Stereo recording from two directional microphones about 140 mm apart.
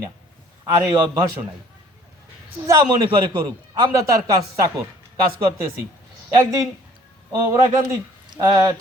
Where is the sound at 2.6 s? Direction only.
20° right (ahead or behind).